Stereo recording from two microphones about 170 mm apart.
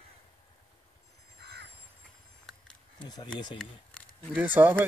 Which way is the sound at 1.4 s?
70° right (ahead or behind).